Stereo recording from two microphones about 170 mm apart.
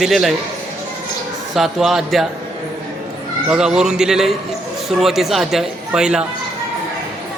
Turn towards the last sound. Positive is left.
turn(degrees=-5)  # may be behind; listen again after turning